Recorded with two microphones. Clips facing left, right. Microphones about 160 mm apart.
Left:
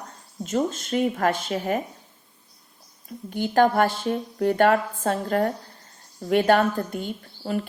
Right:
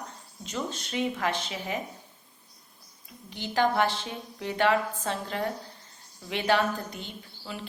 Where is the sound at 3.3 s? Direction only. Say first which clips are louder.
Left 7 dB; 50° left (ahead or behind).